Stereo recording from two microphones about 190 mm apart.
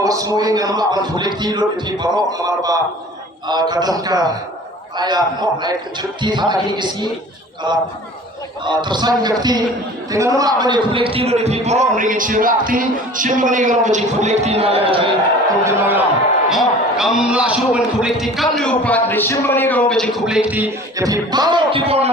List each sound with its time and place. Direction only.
0.0 s a man's voice: 20° right (ahead or behind)
16.5 s a man's voice: centre (ahead or behind)
21.0 s a man's voice: 20° right (ahead or behind)